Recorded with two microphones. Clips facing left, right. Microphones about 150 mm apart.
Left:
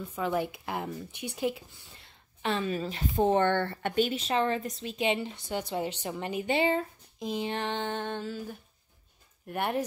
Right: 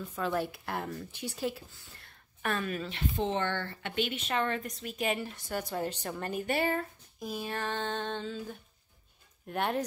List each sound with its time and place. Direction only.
0.1 s speech: 15° left (ahead or behind)
2.0 s a sound: 20° left (ahead or behind)
2.8 s a woman's voice: 40° left (ahead or behind); by 3.7 s 55° left (ahead or behind)
3.8 s a woman's voice: 40° left (ahead or behind); by 9.8 s 10° left (ahead or behind)